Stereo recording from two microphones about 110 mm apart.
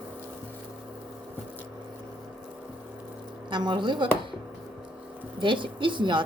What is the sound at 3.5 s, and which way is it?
Speech, 45° right (ahead or behind).